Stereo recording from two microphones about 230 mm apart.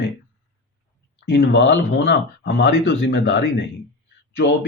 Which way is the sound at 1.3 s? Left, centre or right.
Left.